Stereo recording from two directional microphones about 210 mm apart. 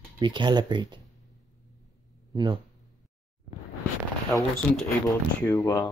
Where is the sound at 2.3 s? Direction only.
20° right (ahead or behind).